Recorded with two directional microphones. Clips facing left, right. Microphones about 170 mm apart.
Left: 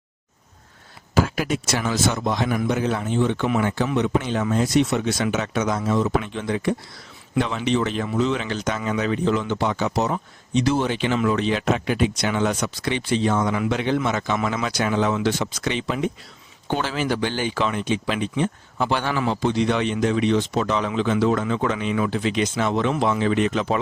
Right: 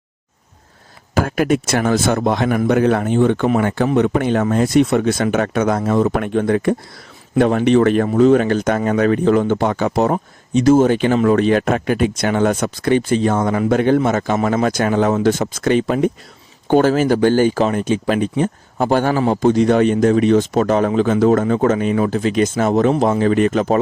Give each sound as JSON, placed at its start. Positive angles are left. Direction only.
{"t": 1.1, "sound": "speech", "side_deg": -55}